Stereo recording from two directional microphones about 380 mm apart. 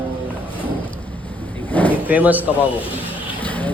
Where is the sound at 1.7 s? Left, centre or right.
Centre.